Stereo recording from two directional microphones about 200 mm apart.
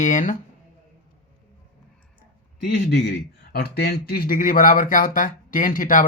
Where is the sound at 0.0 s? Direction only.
40° left (ahead or behind).